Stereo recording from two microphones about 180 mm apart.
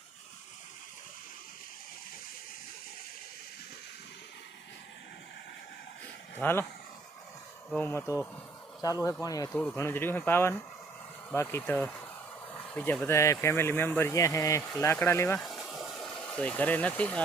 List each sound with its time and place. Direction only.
6.4 s speech: 10° left (ahead or behind)
7.7 s speech: 10° left (ahead or behind)
15.4 s a sound: centre (ahead or behind)